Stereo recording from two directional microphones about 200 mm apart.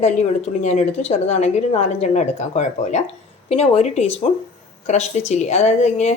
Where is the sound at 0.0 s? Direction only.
35° left (ahead or behind).